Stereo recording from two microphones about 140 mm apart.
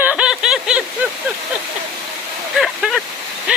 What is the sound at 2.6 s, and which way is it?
Speech, centre (ahead or behind).